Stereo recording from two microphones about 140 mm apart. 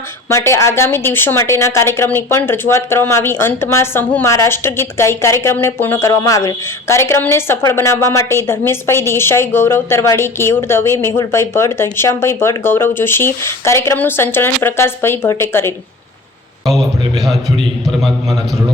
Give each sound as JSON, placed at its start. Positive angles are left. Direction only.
{"t": 0.3, "sound": "a woman's voice", "side_deg": 20}
{"t": 16.6, "sound": "a man's voice", "side_deg": 0}